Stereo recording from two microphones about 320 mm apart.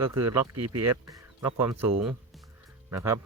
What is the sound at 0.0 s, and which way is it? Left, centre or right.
Speech, centre.